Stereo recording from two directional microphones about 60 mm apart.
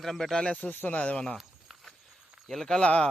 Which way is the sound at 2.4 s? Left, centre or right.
Centre.